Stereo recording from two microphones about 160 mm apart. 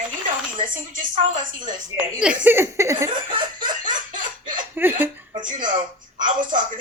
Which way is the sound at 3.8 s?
55° right (ahead or behind).